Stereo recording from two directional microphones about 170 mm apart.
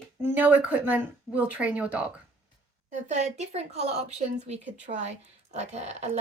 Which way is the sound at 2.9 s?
45° right (ahead or behind).